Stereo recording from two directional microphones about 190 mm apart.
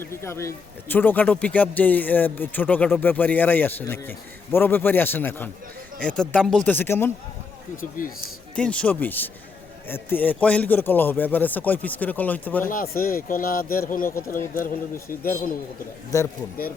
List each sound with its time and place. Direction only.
0.0 s a man's voice: 15° left (ahead or behind)
7.8 s speech: 45° left (ahead or behind)
8.5 s a man's voice: 5° left (ahead or behind)
12.6 s speech: 50° left (ahead or behind)
16.1 s a man's voice: 15° left (ahead or behind)